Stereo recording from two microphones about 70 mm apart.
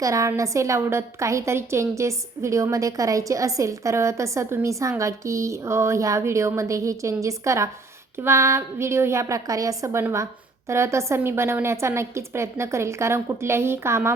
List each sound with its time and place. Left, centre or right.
0.0 s a woman's voice: right
10.0 s a woman's voice: right